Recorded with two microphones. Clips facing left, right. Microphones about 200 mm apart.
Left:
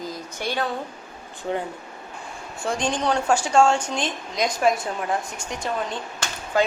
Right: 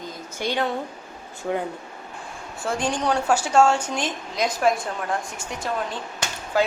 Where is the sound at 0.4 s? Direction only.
15° right (ahead or behind).